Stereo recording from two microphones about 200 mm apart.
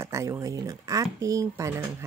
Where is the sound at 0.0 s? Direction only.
15° right (ahead or behind).